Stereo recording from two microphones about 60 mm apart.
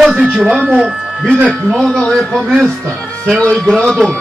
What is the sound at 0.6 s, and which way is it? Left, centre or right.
Speech, centre.